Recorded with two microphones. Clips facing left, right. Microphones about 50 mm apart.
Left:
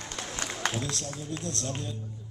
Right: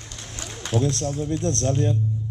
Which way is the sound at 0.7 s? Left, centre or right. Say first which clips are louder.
Right 11 dB; right.